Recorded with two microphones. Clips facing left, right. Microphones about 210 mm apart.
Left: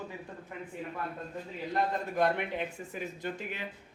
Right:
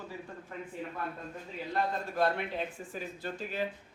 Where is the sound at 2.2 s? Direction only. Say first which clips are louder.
Left 1 dB; 15° left (ahead or behind).